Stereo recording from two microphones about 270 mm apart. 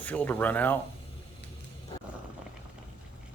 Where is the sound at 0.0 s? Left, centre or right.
Centre.